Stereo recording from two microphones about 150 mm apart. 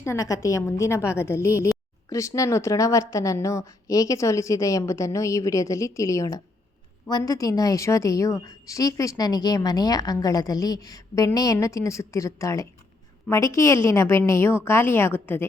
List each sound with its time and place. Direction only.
0.0 s a woman's voice: 20° left (ahead or behind)